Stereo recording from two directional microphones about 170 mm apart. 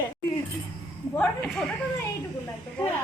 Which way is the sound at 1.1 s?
5° left (ahead or behind).